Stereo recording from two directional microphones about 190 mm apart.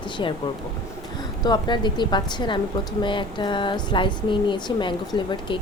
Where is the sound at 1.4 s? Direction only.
20° left (ahead or behind).